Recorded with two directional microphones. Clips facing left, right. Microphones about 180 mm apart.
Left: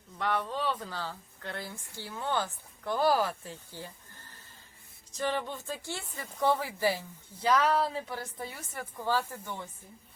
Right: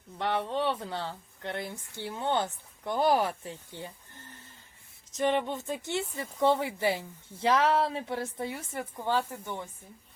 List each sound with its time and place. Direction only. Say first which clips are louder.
0.2 s speech: right 2 dB; 25° right (ahead or behind)
5.1 s speech: right 5 dB; 20° right (ahead or behind)